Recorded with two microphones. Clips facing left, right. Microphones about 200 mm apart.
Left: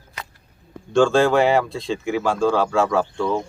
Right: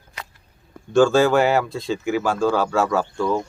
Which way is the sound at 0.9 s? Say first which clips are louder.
Right 1 dB; 5° right (ahead or behind).